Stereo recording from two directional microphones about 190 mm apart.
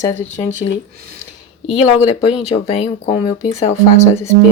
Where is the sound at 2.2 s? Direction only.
35° left (ahead or behind).